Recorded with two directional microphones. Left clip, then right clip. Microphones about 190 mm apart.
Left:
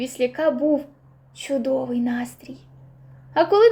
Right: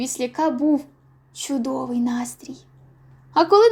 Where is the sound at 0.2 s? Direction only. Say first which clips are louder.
Left 2 dB; 25° right (ahead or behind).